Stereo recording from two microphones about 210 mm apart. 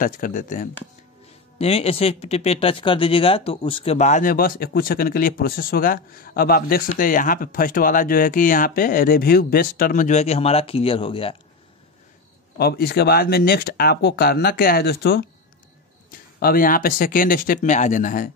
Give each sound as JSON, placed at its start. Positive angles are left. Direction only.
{"t": 0.0, "sound": "speech", "side_deg": 40}
{"t": 1.6, "sound": "speech", "side_deg": 30}
{"t": 12.5, "sound": "speech", "side_deg": 50}